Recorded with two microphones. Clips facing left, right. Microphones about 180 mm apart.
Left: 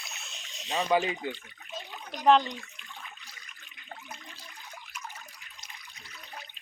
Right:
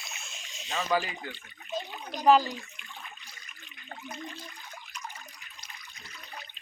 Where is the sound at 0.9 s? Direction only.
25° left (ahead or behind).